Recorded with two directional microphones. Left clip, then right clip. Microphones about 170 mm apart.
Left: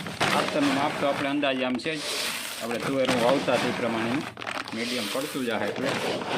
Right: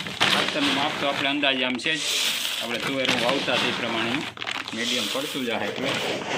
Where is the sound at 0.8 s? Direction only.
50° left (ahead or behind).